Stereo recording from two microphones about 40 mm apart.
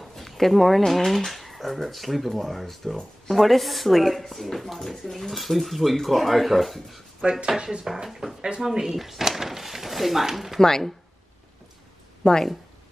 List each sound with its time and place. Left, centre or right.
0.3 s speech: centre
7.2 s speech: centre
7.8 s speech: centre
10.6 s speech: centre
12.2 s speech: left